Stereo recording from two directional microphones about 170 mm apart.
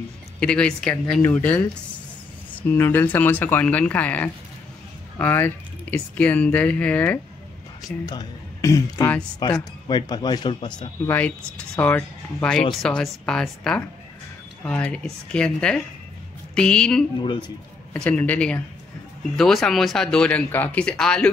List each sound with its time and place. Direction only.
0.4 s speech: 5° left (ahead or behind)
2.7 s speech: 10° left (ahead or behind)
8.0 s speech: 20° left (ahead or behind)
11.1 s speech: 10° left (ahead or behind)
17.2 s speech: 30° left (ahead or behind)
17.9 s speech: 5° left (ahead or behind)